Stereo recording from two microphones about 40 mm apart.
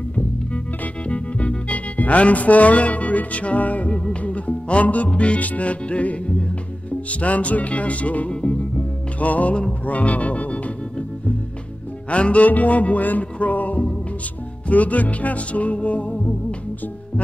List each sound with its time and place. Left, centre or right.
1.0 s music: left
8.3 s music: left